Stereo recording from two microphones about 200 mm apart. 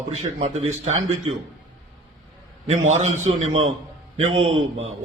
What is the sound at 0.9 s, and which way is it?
Speech, 90° right.